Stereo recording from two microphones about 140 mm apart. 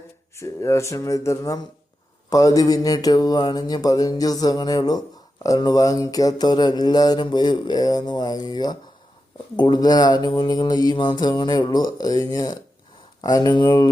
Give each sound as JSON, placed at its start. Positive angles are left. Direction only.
{"t": 0.3, "sound": "mantra", "side_deg": 20}